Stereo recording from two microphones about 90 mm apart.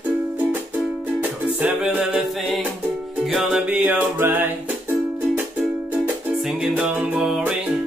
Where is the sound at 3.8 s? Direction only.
25° right (ahead or behind).